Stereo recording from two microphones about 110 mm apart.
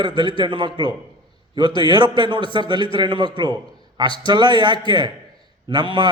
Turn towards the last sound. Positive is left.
turn(degrees=-45)  # may be behind; listen again after turning